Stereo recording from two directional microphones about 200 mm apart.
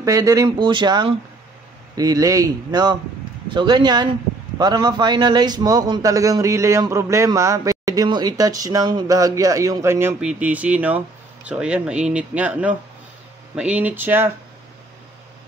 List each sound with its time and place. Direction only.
0.0 s a man's voice: 15° right (ahead or behind)